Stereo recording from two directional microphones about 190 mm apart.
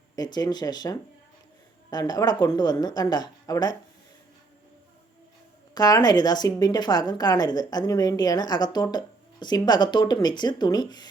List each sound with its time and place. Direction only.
0.2 s a woman's voice: 20° left (ahead or behind)
5.7 s a woman's voice: 20° left (ahead or behind)